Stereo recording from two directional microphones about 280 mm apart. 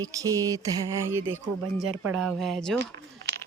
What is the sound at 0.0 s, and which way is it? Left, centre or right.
Speech, centre.